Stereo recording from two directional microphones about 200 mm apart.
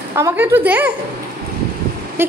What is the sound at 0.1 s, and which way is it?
Speech, 10° right (ahead or behind).